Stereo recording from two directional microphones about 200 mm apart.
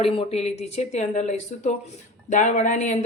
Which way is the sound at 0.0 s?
30° left (ahead or behind).